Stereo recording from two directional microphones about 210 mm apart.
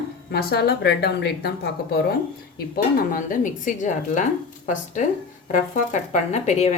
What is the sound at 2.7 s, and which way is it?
Speech, 40° left (ahead or behind).